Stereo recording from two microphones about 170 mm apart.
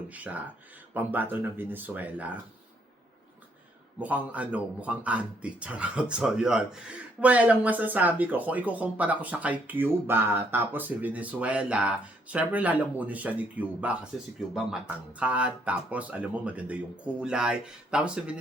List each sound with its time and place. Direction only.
0.1 s a man's voice: 10° right (ahead or behind)
4.0 s a man's voice: 10° right (ahead or behind)